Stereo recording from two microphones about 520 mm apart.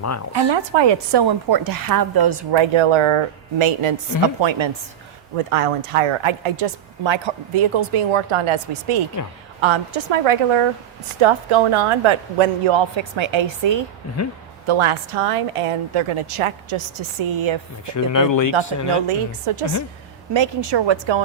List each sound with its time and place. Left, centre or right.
0.3 s a woman's voice: right
4.4 s a woman's voice: right
5.5 s a woman's voice: right
14.7 s a woman's voice: right
17.8 s speech: left
19.0 s a woman's voice: right
20.3 s a woman's voice: right